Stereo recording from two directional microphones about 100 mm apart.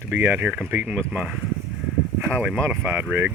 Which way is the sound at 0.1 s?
20° right (ahead or behind).